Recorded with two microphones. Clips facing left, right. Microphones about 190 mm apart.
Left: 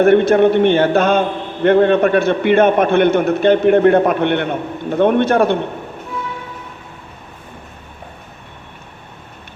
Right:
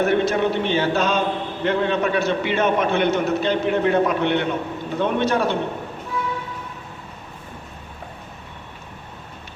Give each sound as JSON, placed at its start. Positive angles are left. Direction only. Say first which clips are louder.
{"t": 0.0, "sound": "a man's voice", "louder": "left 9 dB", "side_deg": 55}